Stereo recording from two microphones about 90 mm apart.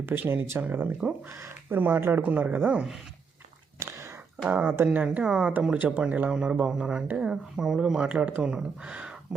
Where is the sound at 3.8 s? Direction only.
35° right (ahead or behind).